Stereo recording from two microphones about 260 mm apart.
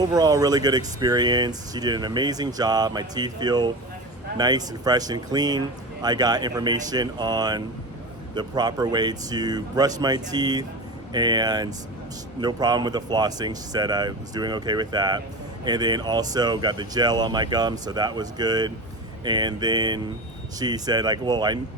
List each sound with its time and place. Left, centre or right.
0.0 s speech: centre